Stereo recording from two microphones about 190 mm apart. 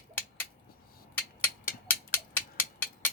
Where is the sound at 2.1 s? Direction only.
10° left (ahead or behind).